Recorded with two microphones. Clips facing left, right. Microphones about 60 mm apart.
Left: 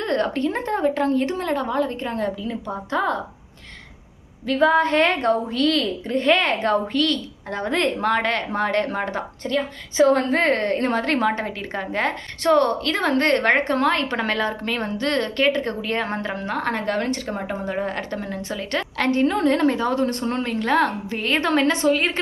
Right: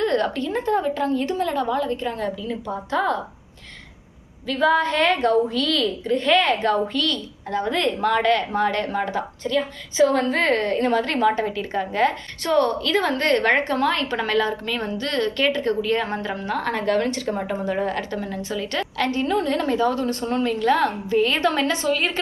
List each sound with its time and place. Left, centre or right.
0.0 s a woman's voice: left
4.5 s a woman's voice: left
21.8 s a woman's voice: left